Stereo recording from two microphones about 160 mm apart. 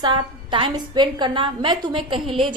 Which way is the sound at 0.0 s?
30° right (ahead or behind).